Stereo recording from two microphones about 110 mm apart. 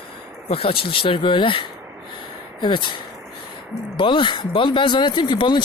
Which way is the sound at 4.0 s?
50° left (ahead or behind).